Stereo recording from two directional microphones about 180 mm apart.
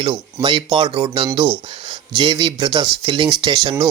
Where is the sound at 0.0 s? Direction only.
25° right (ahead or behind).